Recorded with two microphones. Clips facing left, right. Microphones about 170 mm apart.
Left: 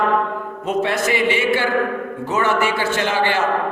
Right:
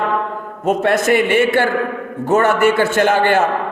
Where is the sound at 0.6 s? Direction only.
50° right (ahead or behind).